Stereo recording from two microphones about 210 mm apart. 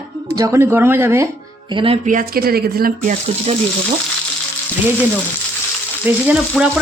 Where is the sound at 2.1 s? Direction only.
40° right (ahead or behind).